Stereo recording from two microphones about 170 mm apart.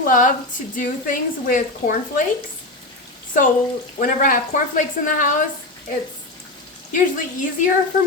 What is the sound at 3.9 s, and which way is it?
Speech, 55° left (ahead or behind).